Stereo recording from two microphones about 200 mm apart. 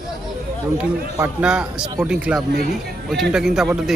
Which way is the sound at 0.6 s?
15° right (ahead or behind).